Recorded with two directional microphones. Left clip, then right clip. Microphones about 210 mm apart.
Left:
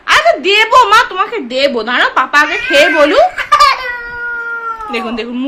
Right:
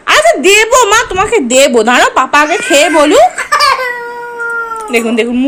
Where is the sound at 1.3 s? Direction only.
15° right (ahead or behind); by 3.2 s centre (ahead or behind).